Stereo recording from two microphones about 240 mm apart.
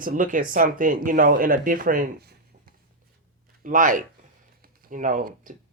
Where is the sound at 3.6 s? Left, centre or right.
Right.